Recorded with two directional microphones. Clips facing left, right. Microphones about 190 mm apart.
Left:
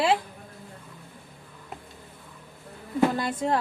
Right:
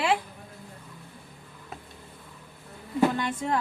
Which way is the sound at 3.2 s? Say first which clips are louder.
Left 2 dB; 35° left (ahead or behind).